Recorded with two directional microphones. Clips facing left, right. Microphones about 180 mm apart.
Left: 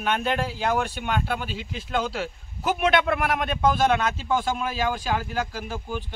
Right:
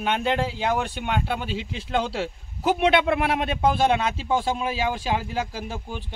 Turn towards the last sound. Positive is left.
turn(degrees=-25)  # may be behind; listen again after turning